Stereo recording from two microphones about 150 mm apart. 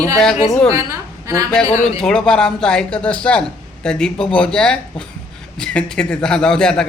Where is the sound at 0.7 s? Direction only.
20° right (ahead or behind).